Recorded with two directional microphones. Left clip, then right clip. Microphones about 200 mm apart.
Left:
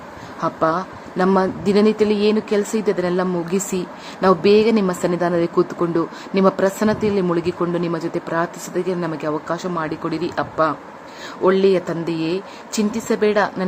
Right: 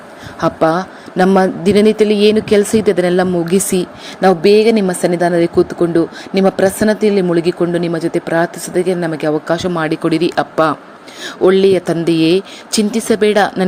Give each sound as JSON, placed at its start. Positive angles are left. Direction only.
{"t": 0.3, "sound": "a woman's voice", "side_deg": -35}